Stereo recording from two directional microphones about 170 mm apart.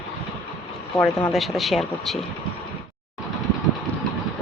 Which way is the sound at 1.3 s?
Centre (ahead or behind).